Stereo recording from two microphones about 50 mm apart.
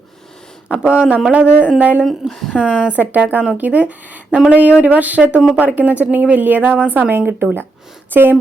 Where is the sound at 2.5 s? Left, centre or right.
Left.